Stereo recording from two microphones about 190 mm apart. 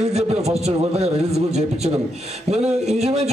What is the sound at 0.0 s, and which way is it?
A man's voice, 35° right (ahead or behind).